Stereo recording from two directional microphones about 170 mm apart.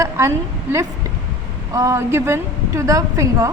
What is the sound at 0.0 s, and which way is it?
A woman's voice, 15° right (ahead or behind).